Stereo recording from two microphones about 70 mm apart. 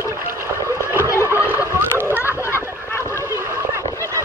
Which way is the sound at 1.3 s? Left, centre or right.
Right.